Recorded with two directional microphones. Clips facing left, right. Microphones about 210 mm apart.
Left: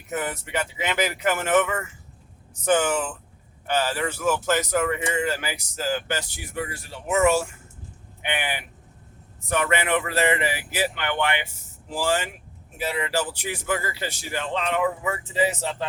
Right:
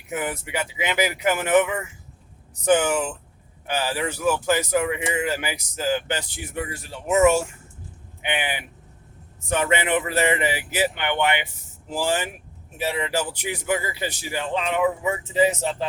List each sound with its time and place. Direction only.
0.1 s speech: 10° right (ahead or behind)
9.5 s speech: 25° right (ahead or behind)